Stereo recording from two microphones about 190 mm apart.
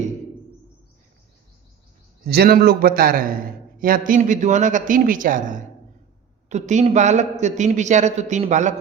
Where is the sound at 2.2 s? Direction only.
55° right (ahead or behind).